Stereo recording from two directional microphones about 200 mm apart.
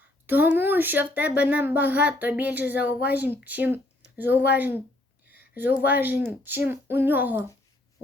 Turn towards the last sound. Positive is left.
turn(degrees=-10)  # may be behind; listen again after turning